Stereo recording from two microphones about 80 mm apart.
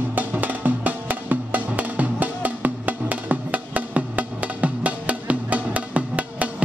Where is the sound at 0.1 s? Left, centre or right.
Right.